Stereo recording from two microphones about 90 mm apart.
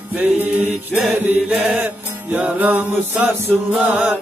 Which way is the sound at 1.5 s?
10° right (ahead or behind).